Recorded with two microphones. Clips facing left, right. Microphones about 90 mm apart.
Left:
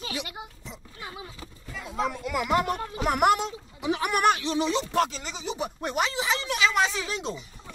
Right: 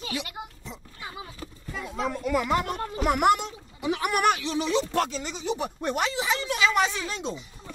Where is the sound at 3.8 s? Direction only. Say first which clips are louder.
Even; 25° left (ahead or behind).